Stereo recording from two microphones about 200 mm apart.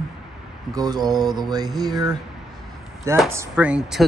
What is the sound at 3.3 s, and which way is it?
Speech, 10° right (ahead or behind).